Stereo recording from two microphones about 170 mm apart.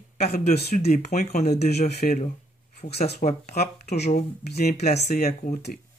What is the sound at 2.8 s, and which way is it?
Speech, 40° left (ahead or behind).